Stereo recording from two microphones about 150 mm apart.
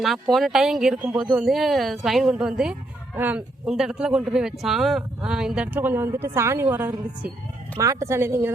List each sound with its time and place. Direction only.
0.0 s speech: centre (ahead or behind)